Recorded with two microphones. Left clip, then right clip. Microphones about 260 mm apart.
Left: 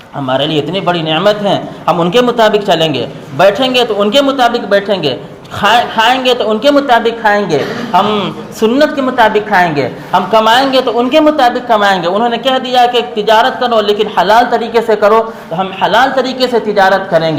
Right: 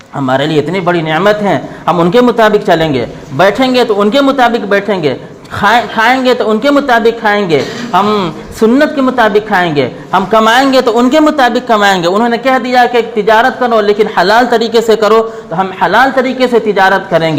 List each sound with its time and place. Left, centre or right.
0.3 s a woman's voice: right
14.2 s a woman's voice: right